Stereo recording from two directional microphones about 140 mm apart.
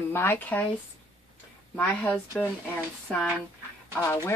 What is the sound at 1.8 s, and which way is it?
Speech, 15° left (ahead or behind).